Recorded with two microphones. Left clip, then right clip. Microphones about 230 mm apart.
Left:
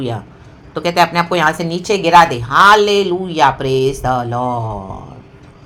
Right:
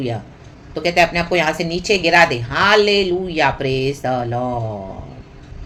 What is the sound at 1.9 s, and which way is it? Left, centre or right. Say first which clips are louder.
Speech: left 4 dB; left.